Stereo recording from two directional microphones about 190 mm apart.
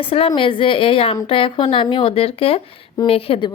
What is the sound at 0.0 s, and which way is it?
Speech, 30° left (ahead or behind).